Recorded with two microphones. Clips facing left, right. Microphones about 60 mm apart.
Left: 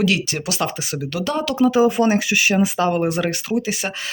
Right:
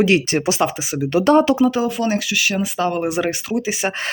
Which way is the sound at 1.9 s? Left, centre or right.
Left.